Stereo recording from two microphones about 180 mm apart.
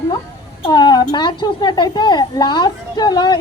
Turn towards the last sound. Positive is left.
turn(degrees=25)  # may be behind; listen again after turning